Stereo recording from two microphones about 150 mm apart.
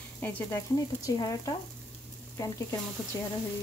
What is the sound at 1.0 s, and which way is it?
Speech, 25° left (ahead or behind).